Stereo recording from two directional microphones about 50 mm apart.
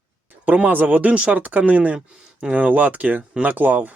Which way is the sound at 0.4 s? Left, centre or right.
Right.